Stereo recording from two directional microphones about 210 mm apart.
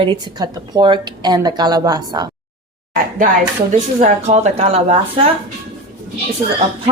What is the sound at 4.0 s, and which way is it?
A woman's voice, 35° right (ahead or behind).